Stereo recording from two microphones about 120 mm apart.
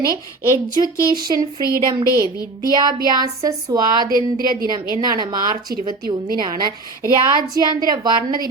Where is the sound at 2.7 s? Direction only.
35° right (ahead or behind).